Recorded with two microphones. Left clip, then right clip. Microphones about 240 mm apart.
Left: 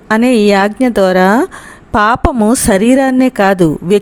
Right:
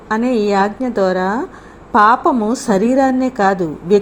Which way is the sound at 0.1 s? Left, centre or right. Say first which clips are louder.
Left 6 dB; left.